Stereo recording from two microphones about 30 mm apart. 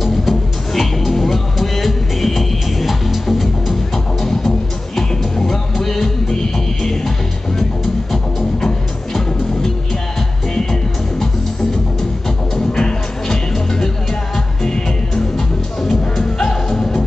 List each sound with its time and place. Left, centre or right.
0.0 s music: centre
4.3 s music: centre
10.5 s music: centre
12.8 s music: centre